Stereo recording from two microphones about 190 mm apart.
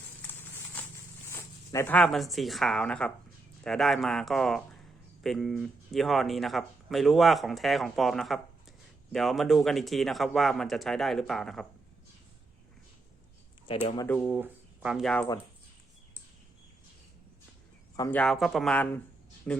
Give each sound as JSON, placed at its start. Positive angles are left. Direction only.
{"t": 0.2, "sound": "a sound", "side_deg": 10}
{"t": 1.3, "sound": "speech", "side_deg": 15}
{"t": 14.3, "sound": "speech", "side_deg": -10}
{"t": 17.9, "sound": "speech", "side_deg": 20}
{"t": 18.2, "sound": "speech", "side_deg": 0}